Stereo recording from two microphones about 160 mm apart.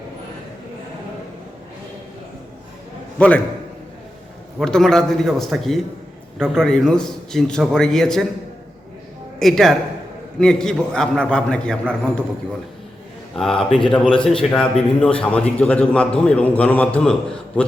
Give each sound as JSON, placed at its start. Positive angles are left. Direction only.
{"t": 3.2, "sound": "a man's voice", "side_deg": 5}
{"t": 4.6, "sound": "a man's voice", "side_deg": 5}
{"t": 9.4, "sound": "a man's voice", "side_deg": 0}
{"t": 13.3, "sound": "a man's voice", "side_deg": 5}
{"t": 13.7, "sound": "speech", "side_deg": 35}
{"t": 14.3, "sound": "a man's voice", "side_deg": 5}